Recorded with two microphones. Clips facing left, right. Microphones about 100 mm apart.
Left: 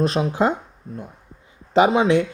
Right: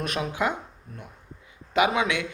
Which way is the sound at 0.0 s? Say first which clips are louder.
Left 8 dB; 30° left (ahead or behind).